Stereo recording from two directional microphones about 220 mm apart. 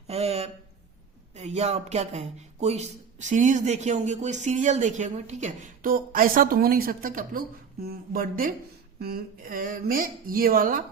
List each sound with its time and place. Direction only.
0.1 s speech: 30° right (ahead or behind)